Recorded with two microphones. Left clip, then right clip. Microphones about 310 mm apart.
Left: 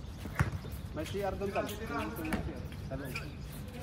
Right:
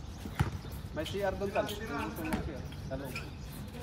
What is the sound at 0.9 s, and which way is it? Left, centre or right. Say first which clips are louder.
Speech: right 2 dB; right.